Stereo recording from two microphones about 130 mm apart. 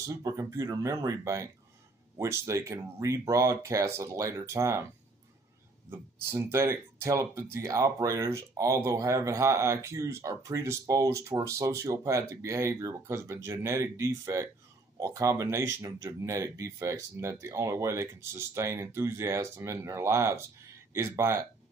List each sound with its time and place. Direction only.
0.1 s speech: 25° right (ahead or behind)
5.9 s speech: 15° right (ahead or behind)